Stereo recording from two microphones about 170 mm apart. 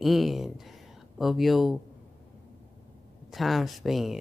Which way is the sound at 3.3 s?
Centre (ahead or behind).